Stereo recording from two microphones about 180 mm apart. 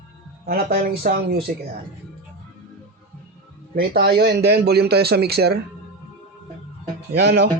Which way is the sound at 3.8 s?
60° right (ahead or behind).